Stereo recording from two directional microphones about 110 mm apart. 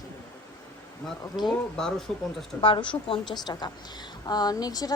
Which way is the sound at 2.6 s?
50° left (ahead or behind).